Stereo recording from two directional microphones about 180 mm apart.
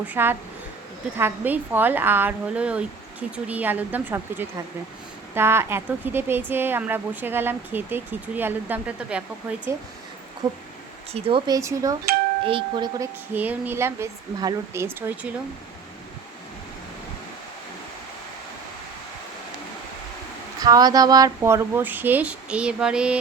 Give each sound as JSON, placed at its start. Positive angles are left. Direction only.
{"t": 0.1, "sound": "speech", "side_deg": -10}
{"t": 11.1, "sound": "speech", "side_deg": -30}
{"t": 13.3, "sound": "speech", "side_deg": -10}
{"t": 20.6, "sound": "speech", "side_deg": -20}